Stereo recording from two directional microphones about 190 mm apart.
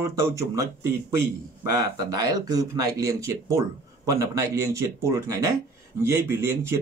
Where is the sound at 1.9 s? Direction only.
20° right (ahead or behind).